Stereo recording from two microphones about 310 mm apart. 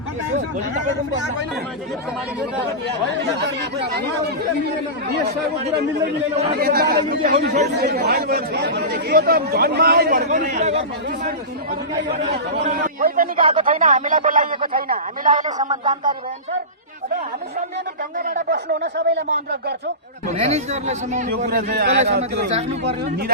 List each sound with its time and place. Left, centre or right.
3.4 s speech: right
6.3 s speech: right
12.6 s speech: right
15.5 s speech: centre
18.3 s speech: right
20.3 s speech: right